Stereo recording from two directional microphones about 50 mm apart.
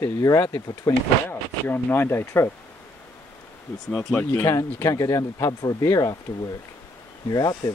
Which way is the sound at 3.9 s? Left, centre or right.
Centre.